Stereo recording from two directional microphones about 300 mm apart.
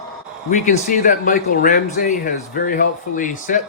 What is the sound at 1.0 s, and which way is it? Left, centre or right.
Speech, left.